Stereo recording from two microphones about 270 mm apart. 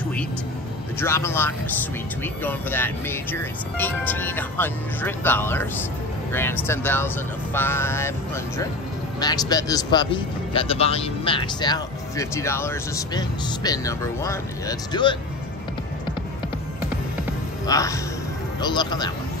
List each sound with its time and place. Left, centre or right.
0.9 s speech: centre
9.2 s speech: centre
17.6 s speech: centre